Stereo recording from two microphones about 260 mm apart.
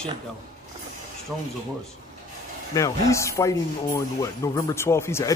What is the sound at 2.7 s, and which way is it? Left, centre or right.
Speech, centre.